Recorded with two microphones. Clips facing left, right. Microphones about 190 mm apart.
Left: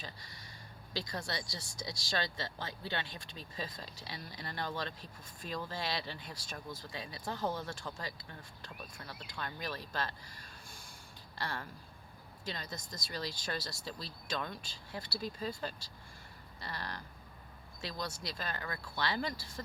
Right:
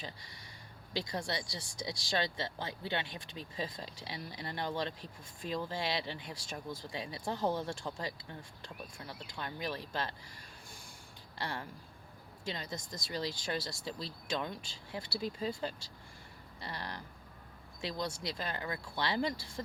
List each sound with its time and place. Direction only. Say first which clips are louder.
0.9 s speech: right 3 dB; 20° right (ahead or behind)
11.3 s speech: right 1 dB; 20° right (ahead or behind)